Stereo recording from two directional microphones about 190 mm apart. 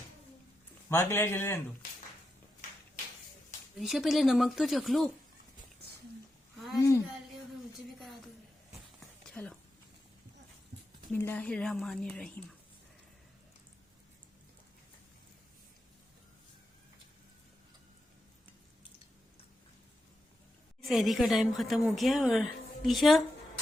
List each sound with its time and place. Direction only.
0.9 s a man's voice: 15° left (ahead or behind)
3.8 s speech: centre (ahead or behind)
6.7 s a man's voice: 15° left (ahead or behind)
9.2 s a sound: 5° left (ahead or behind)
11.1 s speech: 10° left (ahead or behind)
20.8 s speech: centre (ahead or behind)